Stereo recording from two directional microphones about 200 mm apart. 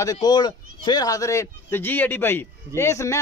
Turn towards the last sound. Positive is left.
turn(degrees=15)  # may be behind; listen again after turning